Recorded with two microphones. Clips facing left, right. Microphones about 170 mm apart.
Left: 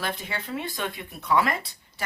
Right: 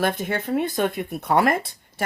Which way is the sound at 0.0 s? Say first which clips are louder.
Right 9 dB; 50° right (ahead or behind).